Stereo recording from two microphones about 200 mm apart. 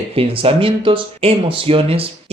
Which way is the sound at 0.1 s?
30° right (ahead or behind).